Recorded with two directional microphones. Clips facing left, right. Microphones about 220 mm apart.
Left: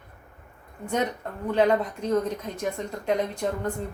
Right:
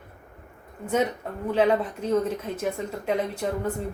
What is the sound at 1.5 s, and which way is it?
Speech, 5° right (ahead or behind).